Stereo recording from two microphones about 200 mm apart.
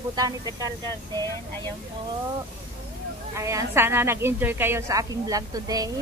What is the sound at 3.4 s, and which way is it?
Speech, 15° right (ahead or behind).